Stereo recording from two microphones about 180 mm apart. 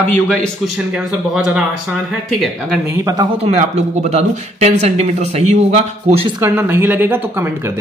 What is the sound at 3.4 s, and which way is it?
A man's voice, 35° right (ahead or behind).